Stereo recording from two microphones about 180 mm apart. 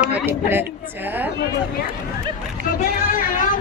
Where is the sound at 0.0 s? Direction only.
10° right (ahead or behind).